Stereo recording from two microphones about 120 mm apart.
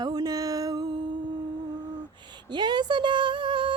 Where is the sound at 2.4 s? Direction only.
40° right (ahead or behind).